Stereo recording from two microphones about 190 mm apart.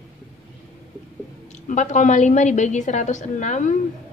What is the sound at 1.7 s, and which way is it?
A woman's voice, 40° left (ahead or behind).